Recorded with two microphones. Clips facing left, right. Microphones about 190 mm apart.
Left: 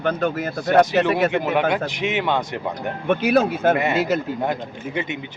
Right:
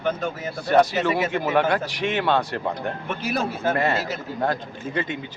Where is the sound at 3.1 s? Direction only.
60° left (ahead or behind).